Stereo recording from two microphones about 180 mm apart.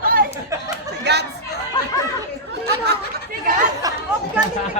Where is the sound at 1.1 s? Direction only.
70° right (ahead or behind).